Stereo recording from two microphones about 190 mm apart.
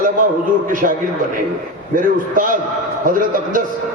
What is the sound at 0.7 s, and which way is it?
Speech, 45° right (ahead or behind).